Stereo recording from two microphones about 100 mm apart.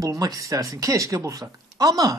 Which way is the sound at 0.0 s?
35° right (ahead or behind).